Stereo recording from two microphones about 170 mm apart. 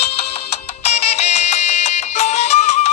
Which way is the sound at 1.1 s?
40° left (ahead or behind).